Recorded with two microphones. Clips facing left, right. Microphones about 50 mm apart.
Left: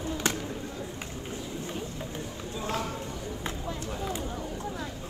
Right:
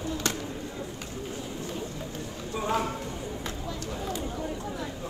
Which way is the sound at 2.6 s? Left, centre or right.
Right.